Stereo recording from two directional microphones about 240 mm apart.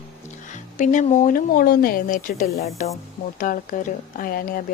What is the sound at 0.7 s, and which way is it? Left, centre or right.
Speech, left.